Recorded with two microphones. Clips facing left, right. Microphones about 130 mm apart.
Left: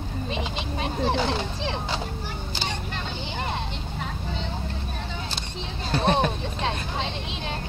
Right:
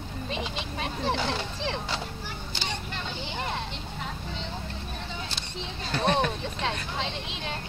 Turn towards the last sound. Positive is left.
turn(degrees=25)  # may be behind; listen again after turning